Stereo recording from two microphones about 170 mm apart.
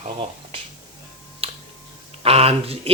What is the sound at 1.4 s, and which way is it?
Finger snapping, 35° right (ahead or behind).